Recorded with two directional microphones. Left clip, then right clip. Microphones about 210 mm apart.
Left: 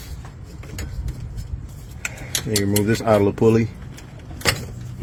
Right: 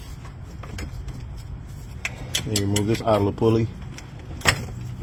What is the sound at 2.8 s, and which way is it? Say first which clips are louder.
Speech: left 4 dB; 35° left (ahead or behind).